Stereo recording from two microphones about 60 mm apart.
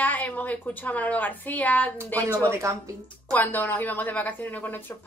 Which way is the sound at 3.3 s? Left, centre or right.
Left.